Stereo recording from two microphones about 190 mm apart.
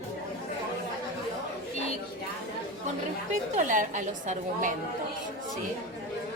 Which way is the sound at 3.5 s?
40° right (ahead or behind).